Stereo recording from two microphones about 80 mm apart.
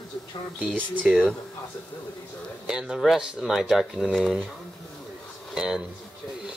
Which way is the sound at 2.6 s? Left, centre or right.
Centre.